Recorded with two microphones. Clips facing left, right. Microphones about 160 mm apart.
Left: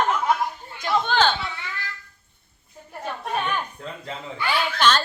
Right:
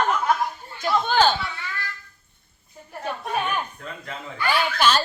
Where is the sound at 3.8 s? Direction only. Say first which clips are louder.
Left 1 dB; 25° left (ahead or behind).